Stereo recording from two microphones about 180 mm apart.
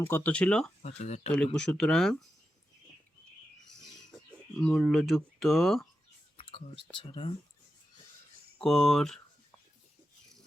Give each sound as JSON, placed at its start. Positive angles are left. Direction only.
{"t": 0.0, "sound": "speech", "side_deg": 10}
{"t": 0.8, "sound": "speech", "side_deg": 40}
{"t": 1.5, "sound": "speech", "side_deg": 5}
{"t": 4.6, "sound": "speech", "side_deg": 5}
{"t": 6.3, "sound": "whispering", "side_deg": 30}
{"t": 6.9, "sound": "speech", "side_deg": 30}
{"t": 8.5, "sound": "speech", "side_deg": 0}